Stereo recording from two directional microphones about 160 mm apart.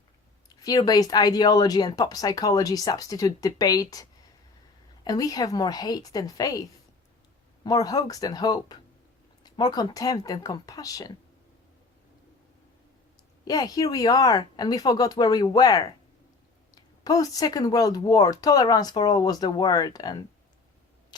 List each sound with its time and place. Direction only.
0.4 s speech: 25° left (ahead or behind)
5.0 s speech: 25° left (ahead or behind)
7.6 s speech: 25° left (ahead or behind)
13.4 s speech: 25° left (ahead or behind)
21.1 s vehicle: 25° left (ahead or behind)